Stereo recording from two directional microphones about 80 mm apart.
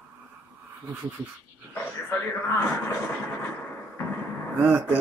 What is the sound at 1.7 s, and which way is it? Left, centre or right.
Speech, left.